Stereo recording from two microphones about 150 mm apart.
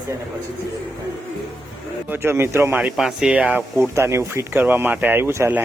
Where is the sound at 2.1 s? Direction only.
15° right (ahead or behind).